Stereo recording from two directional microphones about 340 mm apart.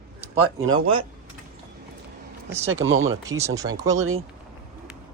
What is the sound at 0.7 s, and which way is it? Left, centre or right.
Speech, centre.